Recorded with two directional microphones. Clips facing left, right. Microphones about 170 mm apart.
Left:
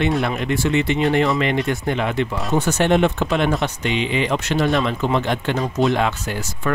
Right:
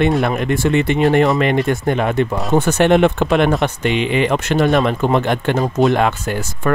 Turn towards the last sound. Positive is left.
turn(degrees=-55)  # may be behind; listen again after turning